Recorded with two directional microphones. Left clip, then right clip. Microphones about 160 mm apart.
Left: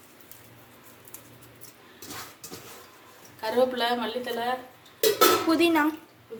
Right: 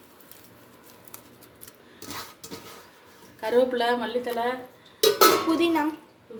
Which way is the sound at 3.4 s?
65° right (ahead or behind).